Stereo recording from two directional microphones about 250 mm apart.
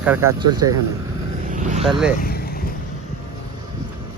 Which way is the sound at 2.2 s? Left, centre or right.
Left.